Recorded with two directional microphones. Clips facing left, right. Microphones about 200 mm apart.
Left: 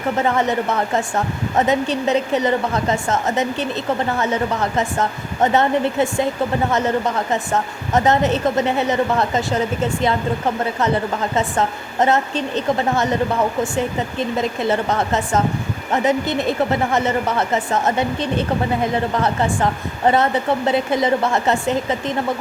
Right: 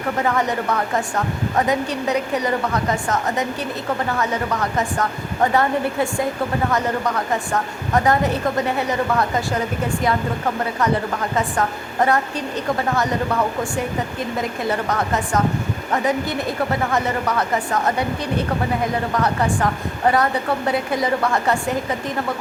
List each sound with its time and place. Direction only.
0.2 s a woman's voice: 25° left (ahead or behind)
4.8 s a woman's voice: 25° left (ahead or behind)
14.7 s a woman's voice: 25° left (ahead or behind)